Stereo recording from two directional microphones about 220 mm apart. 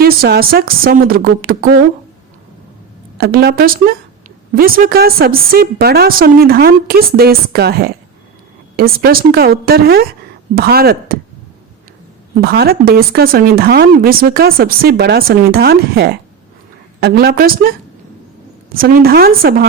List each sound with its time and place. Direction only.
0.0 s speech: 45° right (ahead or behind)
3.2 s speech: 45° right (ahead or behind)
12.4 s speech: 45° right (ahead or behind)